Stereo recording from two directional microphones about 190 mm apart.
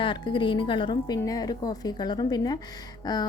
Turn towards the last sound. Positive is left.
turn(degrees=20)  # may be behind; listen again after turning